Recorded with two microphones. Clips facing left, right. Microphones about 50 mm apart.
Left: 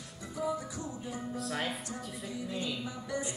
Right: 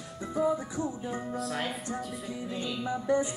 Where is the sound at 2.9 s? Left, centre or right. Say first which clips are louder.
Right 10 dB; right.